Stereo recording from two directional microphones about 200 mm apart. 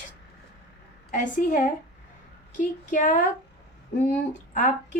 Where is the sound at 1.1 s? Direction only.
40° left (ahead or behind).